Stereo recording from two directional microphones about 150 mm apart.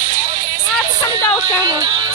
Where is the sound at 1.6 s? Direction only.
30° right (ahead or behind).